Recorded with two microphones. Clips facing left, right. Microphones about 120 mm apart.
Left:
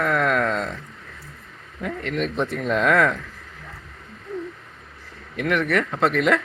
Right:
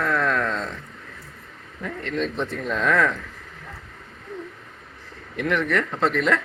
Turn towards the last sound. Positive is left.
turn(degrees=10)  # may be behind; listen again after turning